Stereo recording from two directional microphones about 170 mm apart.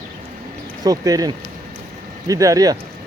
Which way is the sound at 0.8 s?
20° right (ahead or behind).